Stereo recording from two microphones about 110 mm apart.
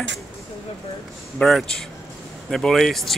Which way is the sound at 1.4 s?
5° left (ahead or behind).